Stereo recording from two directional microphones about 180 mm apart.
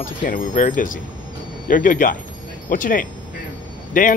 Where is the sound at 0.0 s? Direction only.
50° left (ahead or behind).